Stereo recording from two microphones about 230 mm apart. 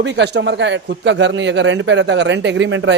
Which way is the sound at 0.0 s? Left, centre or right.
Right.